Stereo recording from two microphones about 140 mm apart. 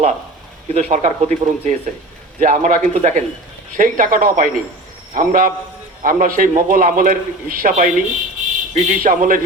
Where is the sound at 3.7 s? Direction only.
75° right (ahead or behind).